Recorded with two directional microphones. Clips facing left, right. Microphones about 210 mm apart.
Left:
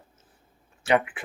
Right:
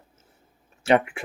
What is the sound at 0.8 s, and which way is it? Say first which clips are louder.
Speech: right 3 dB; 25° right (ahead or behind).